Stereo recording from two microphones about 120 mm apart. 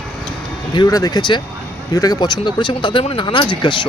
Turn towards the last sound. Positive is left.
turn(degrees=40)  # may be behind; listen again after turning